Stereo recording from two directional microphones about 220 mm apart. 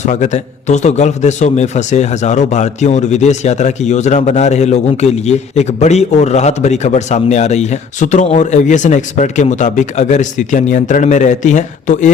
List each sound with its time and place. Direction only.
0.0 s a man's voice: 30° left (ahead or behind)